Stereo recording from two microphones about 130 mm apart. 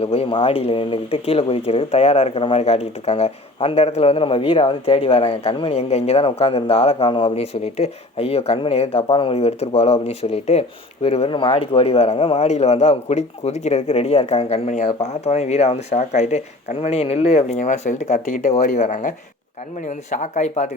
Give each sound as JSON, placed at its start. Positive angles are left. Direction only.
{"t": 0.0, "sound": "speech", "side_deg": 50}
{"t": 7.5, "sound": "speech", "side_deg": 55}